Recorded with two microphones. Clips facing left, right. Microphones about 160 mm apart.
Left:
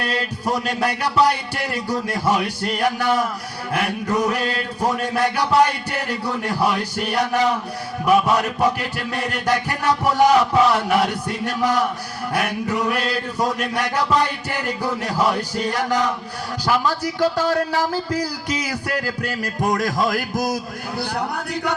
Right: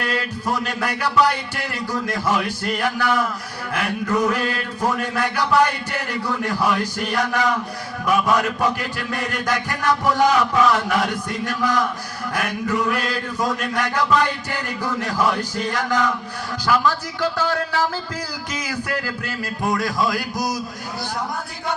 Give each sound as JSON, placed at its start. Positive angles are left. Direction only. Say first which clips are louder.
{"t": 0.0, "sound": "speech", "louder": "left 1 dB", "side_deg": 35}
{"t": 19.7, "sound": "a sound", "louder": "even", "side_deg": 45}
{"t": 21.2, "sound": "music", "louder": "left 3 dB", "side_deg": 70}